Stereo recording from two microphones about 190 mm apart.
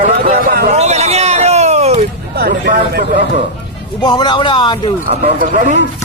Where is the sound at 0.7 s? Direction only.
35° right (ahead or behind).